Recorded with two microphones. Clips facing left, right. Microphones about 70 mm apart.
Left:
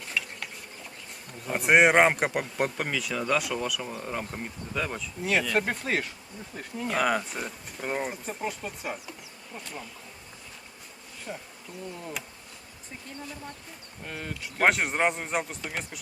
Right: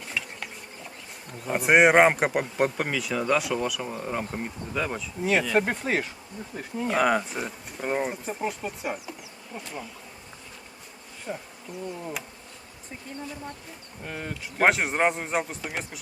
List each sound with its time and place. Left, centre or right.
0.0 s insect: centre
1.3 s speech: centre
11.3 s speech: centre